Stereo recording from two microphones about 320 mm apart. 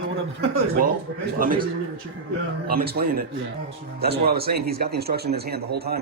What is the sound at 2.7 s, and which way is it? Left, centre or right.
Speech, right.